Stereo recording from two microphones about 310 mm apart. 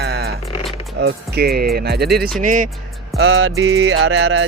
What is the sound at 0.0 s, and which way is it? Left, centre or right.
Music, right.